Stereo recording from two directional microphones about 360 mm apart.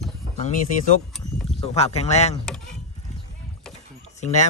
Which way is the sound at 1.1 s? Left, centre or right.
Centre.